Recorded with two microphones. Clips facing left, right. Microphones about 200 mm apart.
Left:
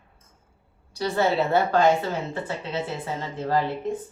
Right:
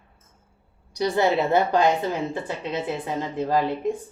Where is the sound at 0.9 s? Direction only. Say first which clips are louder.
Right 2 dB; 15° right (ahead or behind).